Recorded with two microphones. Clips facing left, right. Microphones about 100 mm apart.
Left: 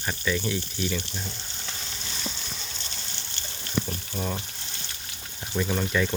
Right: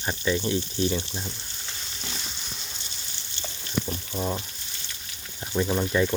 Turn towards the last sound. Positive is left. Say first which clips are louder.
# right 2 dB
turn(degrees=-25)  # may be behind; listen again after turning